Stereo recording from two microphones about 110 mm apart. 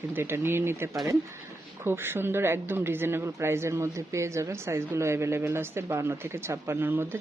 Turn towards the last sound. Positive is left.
turn(degrees=-20)  # may be behind; listen again after turning